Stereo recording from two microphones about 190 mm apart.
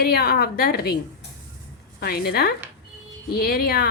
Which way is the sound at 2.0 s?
55° left (ahead or behind).